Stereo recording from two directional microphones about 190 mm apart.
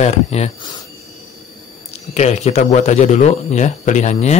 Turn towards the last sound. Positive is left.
turn(degrees=40)  # may be behind; listen again after turning